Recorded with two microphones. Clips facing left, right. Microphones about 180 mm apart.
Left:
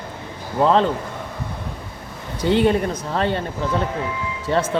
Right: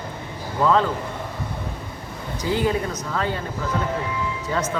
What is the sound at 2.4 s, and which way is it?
Speech, 70° left (ahead or behind).